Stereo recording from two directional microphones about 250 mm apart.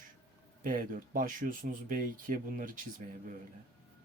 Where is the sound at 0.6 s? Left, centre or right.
Right.